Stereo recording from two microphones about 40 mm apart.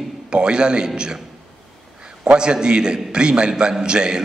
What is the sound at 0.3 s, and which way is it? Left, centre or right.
Speech, right.